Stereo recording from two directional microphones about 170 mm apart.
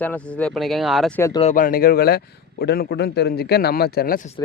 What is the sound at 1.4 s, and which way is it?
Speech, 45° left (ahead or behind).